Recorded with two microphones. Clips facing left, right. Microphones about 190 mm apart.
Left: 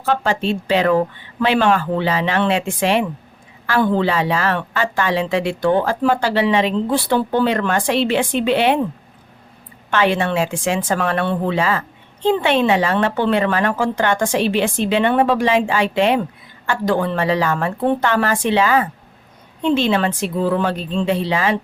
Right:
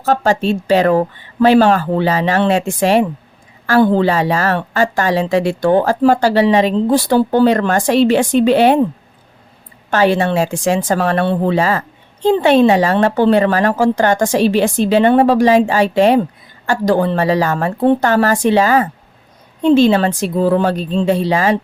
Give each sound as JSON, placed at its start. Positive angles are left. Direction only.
{"t": 0.0, "sound": "a woman's voice", "side_deg": -40}
{"t": 9.9, "sound": "a woman's voice", "side_deg": -40}